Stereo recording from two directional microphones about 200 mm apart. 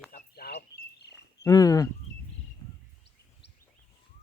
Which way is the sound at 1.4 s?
15° left (ahead or behind).